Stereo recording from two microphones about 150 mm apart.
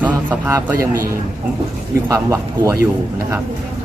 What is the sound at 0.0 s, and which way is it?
Speech, 15° right (ahead or behind).